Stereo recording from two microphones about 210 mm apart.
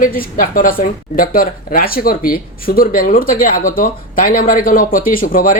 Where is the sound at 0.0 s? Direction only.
40° left (ahead or behind).